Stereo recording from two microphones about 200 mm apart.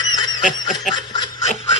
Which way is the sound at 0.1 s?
20° left (ahead or behind).